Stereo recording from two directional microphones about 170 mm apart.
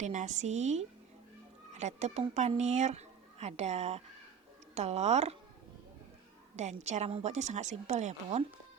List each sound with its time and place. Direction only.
0.0 s a woman's voice: 45° right (ahead or behind)
6.6 s a woman's voice: 40° right (ahead or behind)